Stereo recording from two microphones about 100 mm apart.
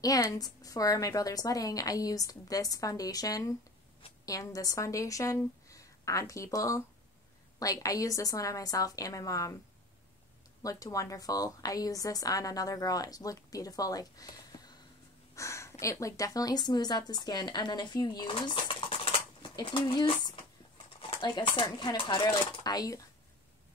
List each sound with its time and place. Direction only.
0.0 s a woman's voice: 35° left (ahead or behind)
10.6 s a woman's voice: 35° left (ahead or behind)
15.3 s a sound: 30° left (ahead or behind)
15.8 s a woman's voice: 30° left (ahead or behind); by 18.9 s 60° left (ahead or behind)
19.5 s a sound: 55° left (ahead or behind)
21.2 s a woman's voice: 50° left (ahead or behind)